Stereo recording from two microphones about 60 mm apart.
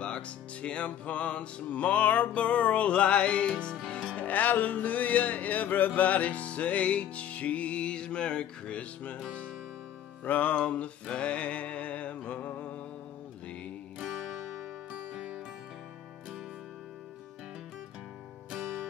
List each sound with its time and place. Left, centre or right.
0.0 s music: centre
4.2 s music: left
10.2 s music: left
13.9 s music: centre
14.9 s music: right